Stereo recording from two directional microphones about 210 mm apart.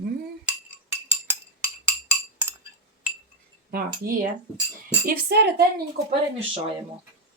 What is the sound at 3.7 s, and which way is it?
Speech, 45° right (ahead or behind).